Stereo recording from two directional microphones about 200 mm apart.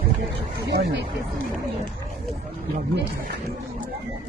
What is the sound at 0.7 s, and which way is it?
Speech, 60° right (ahead or behind).